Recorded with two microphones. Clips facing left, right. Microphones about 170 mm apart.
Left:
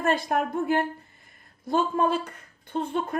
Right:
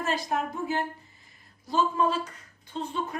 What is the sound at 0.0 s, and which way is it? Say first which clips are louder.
A woman's voice: left 4 dB; 55° left (ahead or behind).